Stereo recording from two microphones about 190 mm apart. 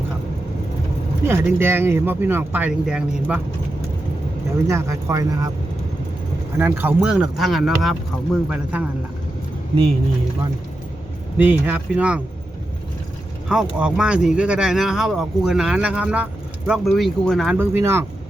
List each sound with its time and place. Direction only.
1.3 s speech: 10° right (ahead or behind)
4.7 s speech: 15° right (ahead or behind)
6.6 s speech: 10° right (ahead or behind)
11.3 s speech: 10° right (ahead or behind)
13.7 s speech: 5° right (ahead or behind)